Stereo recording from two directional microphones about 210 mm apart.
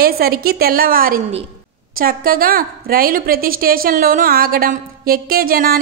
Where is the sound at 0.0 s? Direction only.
45° right (ahead or behind).